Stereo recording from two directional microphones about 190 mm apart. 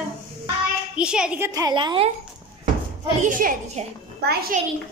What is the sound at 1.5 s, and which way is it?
Speech, 20° right (ahead or behind).